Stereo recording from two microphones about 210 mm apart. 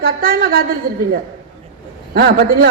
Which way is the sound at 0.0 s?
45° right (ahead or behind).